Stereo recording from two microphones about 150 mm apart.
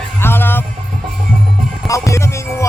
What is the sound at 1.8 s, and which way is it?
Music, 20° left (ahead or behind).